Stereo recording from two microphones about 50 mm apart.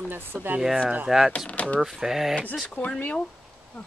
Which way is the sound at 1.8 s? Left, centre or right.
Centre.